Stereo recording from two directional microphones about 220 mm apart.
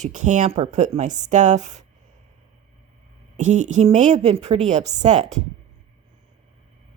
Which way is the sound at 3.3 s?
35° right (ahead or behind).